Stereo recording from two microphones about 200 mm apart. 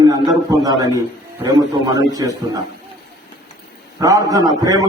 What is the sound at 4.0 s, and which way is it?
Speech, 15° right (ahead or behind).